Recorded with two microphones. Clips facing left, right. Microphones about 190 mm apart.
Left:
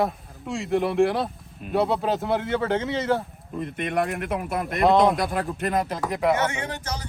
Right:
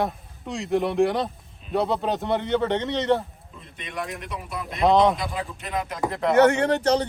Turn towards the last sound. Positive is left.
turn(degrees=-65)  # may be behind; listen again after turning